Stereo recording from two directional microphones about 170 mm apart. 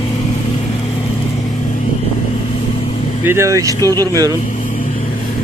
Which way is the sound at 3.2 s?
15° right (ahead or behind).